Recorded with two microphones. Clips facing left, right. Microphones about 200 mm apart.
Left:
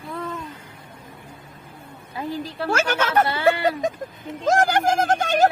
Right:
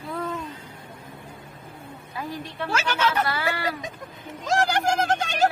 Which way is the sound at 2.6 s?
50° left (ahead or behind).